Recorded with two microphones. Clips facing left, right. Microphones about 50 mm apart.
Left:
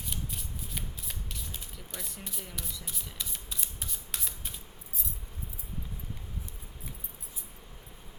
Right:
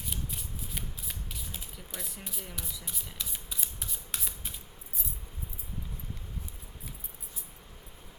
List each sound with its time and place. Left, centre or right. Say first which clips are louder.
0.1 s shuffling cards: even; centre